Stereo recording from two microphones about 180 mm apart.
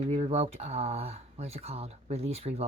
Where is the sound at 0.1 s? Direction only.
35° right (ahead or behind).